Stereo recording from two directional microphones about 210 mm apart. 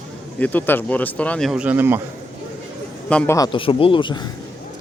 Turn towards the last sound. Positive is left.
turn(degrees=20)  # may be behind; listen again after turning